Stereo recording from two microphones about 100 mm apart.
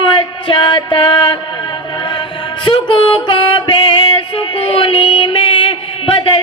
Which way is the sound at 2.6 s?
55° left (ahead or behind).